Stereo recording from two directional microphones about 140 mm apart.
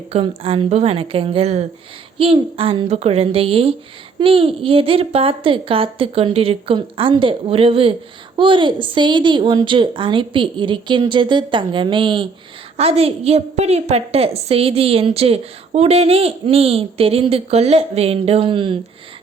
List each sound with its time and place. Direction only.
0.1 s a woman's voice: 45° right (ahead or behind)
12.7 s a woman's voice: 45° right (ahead or behind)